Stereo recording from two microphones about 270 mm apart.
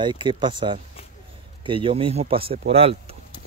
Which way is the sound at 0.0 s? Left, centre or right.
Centre.